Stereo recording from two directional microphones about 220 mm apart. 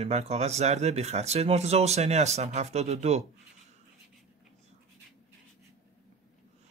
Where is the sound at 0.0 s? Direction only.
30° right (ahead or behind).